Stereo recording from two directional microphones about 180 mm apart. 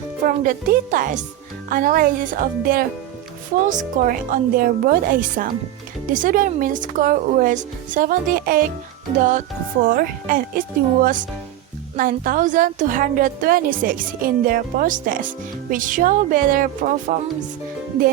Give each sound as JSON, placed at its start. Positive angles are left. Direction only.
{"t": 0.3, "sound": "a woman's voice", "side_deg": -50}